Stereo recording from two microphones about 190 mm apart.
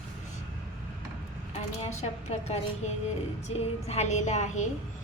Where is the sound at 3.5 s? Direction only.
35° left (ahead or behind).